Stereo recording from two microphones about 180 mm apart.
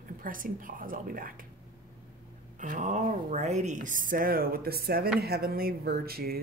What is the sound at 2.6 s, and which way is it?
Speech, 45° right (ahead or behind).